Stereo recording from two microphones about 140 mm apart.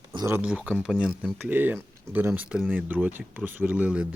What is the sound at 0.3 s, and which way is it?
Speech, 15° right (ahead or behind).